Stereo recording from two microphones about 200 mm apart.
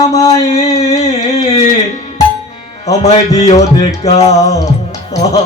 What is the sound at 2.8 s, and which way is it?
Music, 35° left (ahead or behind).